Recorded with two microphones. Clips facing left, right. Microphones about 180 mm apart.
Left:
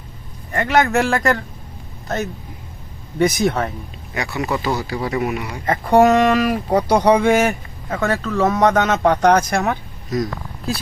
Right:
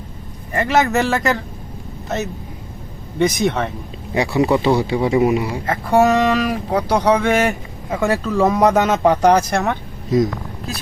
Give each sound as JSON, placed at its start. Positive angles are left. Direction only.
{"t": 0.5, "sound": "speech", "side_deg": -5}
{"t": 4.1, "sound": "a man's voice", "side_deg": -30}
{"t": 6.0, "sound": "speech", "side_deg": 10}
{"t": 7.9, "sound": "speech", "side_deg": -10}